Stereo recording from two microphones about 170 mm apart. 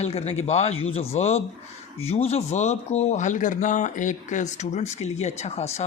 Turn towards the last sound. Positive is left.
turn(degrees=40)  # may be behind; listen again after turning